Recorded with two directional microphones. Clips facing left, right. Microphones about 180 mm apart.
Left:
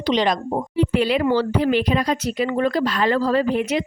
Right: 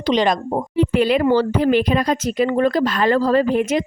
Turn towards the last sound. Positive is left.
turn(degrees=-45)  # may be behind; listen again after turning